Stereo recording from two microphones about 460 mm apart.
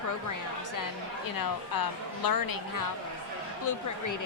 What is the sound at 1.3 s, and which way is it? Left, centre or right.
A woman's voice, left.